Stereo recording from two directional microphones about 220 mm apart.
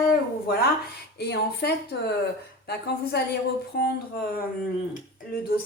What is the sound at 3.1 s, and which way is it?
Speech, 50° left (ahead or behind).